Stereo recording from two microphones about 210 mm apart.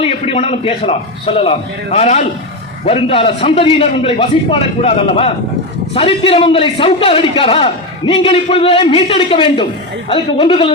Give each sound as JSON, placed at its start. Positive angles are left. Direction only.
{"t": 0.0, "sound": "a man's voice", "side_deg": 30}